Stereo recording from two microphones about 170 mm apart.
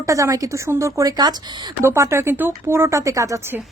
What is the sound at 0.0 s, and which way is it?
A woman's voice, 20° right (ahead or behind).